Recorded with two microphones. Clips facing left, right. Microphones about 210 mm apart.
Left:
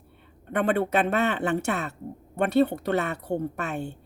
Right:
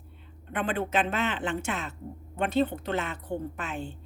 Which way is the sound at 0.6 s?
65° left (ahead or behind).